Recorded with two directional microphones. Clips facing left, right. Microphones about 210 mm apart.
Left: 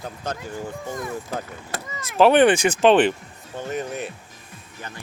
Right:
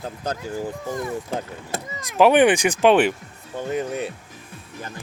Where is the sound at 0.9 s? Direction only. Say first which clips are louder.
Right 3 dB; 30° right (ahead or behind).